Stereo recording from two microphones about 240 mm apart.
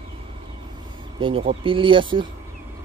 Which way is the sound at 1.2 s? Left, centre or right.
Right.